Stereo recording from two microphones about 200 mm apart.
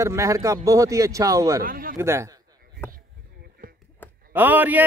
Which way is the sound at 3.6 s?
45° right (ahead or behind).